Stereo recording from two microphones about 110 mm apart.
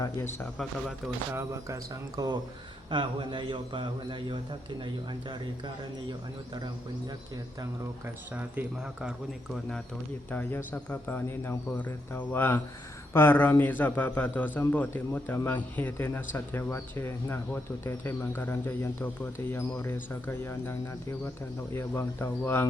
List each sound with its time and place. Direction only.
1.3 s speech: 25° right (ahead or behind)
2.9 s a man's voice: 45° right (ahead or behind)
8.5 s speech: 10° right (ahead or behind)
10.3 s a man's voice: 20° left (ahead or behind)